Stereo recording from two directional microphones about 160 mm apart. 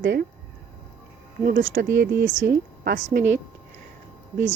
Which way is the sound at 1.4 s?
90° right.